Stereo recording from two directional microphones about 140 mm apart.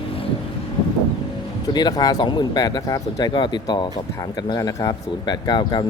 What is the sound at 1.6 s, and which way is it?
Speech, 30° left (ahead or behind).